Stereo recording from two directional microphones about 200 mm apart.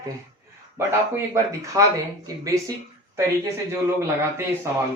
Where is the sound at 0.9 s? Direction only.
15° right (ahead or behind).